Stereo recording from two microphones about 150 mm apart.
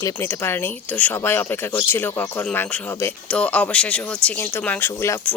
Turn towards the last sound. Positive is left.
turn(degrees=15)  # may be behind; listen again after turning